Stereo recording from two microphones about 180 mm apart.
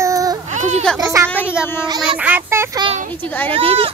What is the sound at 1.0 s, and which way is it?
Speech, 15° right (ahead or behind).